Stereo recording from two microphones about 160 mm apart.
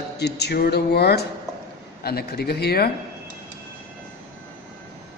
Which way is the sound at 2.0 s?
75° left (ahead or behind).